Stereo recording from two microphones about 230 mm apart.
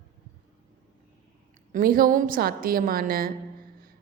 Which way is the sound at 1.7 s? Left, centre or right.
Right.